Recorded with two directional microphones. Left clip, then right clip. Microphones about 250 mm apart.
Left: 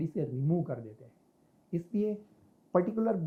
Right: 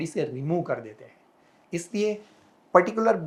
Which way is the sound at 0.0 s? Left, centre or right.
Centre.